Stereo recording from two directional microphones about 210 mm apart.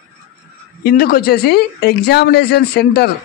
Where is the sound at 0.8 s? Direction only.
45° left (ahead or behind).